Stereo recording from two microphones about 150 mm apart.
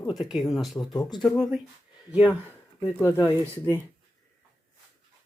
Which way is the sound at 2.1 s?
10° right (ahead or behind).